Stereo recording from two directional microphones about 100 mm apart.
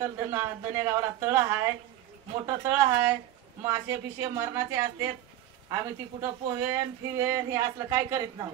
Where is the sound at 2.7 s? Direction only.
25° right (ahead or behind).